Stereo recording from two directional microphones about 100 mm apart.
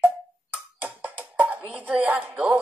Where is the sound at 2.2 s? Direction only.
5° right (ahead or behind).